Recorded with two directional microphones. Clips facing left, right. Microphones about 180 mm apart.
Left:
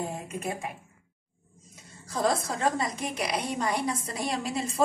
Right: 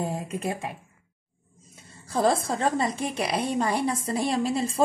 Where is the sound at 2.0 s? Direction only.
30° right (ahead or behind).